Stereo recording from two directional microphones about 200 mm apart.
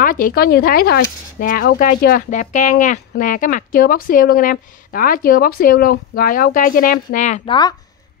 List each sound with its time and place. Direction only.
0.0 s speech: 45° left (ahead or behind)